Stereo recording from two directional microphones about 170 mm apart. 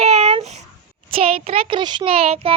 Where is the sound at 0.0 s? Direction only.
40° right (ahead or behind).